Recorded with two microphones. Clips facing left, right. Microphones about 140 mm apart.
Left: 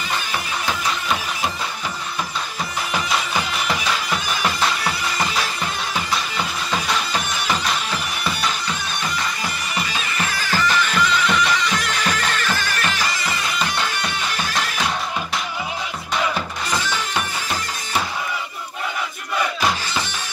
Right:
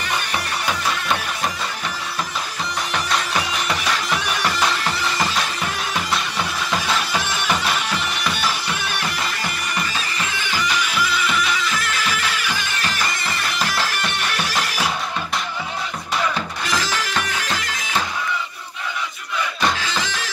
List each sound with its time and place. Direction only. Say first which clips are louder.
2.9 s music: even; 5° left (ahead or behind)
10.6 s music: left 3 dB; 10° right (ahead or behind)
14.3 s music: right 1 dB; 5° right (ahead or behind)
16.6 s music: right 2 dB; 90° right
20.0 s music: right 1 dB; 90° right